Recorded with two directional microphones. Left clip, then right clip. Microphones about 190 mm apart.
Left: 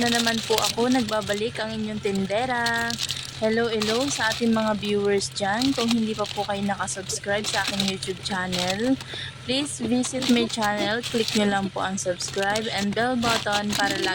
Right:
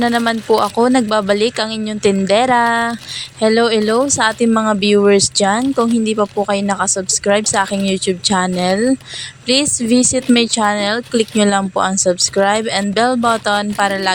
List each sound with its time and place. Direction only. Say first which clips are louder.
0.0 s speech: right 7 dB; 30° right (ahead or behind)